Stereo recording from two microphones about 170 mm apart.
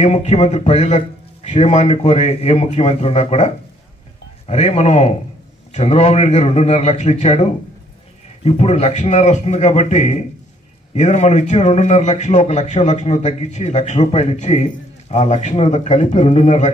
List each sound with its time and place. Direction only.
0.0 s a man's voice: 40° left (ahead or behind)
8.5 s a man's voice: 40° left (ahead or behind)